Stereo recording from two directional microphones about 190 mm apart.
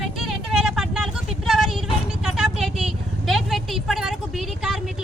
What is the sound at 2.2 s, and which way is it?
Vehicle, centre (ahead or behind).